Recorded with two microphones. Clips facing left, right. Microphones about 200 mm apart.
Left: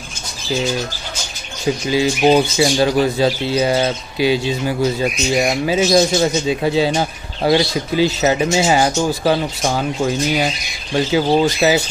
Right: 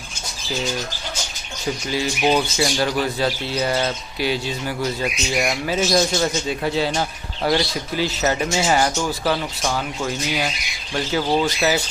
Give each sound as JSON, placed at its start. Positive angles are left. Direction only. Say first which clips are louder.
{"t": 1.9, "sound": "speech", "louder": "left 6 dB", "side_deg": 15}
{"t": 11.0, "sound": "speech", "louder": "left 6 dB", "side_deg": 15}